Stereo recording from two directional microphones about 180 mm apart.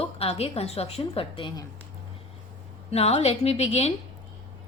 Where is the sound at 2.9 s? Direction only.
35° left (ahead or behind).